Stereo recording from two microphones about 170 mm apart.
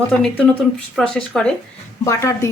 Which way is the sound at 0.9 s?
5° left (ahead or behind).